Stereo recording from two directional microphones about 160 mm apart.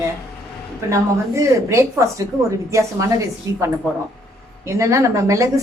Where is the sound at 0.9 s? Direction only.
20° right (ahead or behind).